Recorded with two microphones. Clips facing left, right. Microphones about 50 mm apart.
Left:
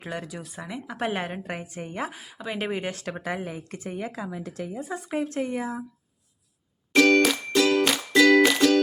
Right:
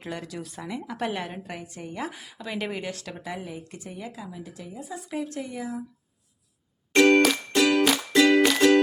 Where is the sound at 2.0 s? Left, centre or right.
Centre.